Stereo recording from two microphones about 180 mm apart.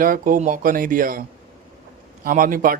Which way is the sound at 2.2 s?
50° right (ahead or behind).